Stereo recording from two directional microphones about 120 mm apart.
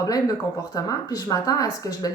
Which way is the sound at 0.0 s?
30° left (ahead or behind).